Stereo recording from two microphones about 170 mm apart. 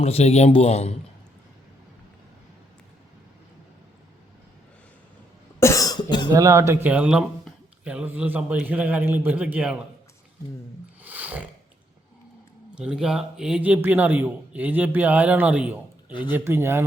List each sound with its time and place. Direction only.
0.0 s speech: 35° left (ahead or behind)
5.5 s cough: 20° left (ahead or behind)
6.2 s a man's voice: 15° right (ahead or behind)
11.0 s roaring cats: 10° right (ahead or behind)
12.7 s a man's voice: 5° right (ahead or behind)